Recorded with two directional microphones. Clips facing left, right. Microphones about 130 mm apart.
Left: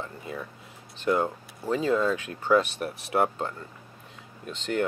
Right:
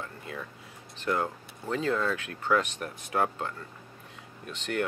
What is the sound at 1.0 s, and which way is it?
Speech, 20° left (ahead or behind).